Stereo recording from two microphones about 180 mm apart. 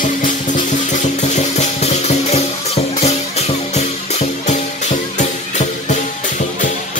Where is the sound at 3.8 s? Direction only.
40° left (ahead or behind).